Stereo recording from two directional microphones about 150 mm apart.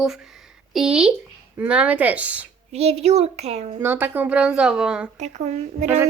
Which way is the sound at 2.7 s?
45° right (ahead or behind).